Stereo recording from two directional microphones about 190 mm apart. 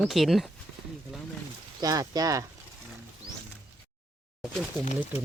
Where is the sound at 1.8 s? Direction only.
20° right (ahead or behind).